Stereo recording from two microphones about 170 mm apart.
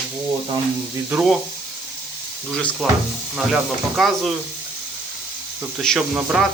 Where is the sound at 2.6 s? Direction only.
5° left (ahead or behind).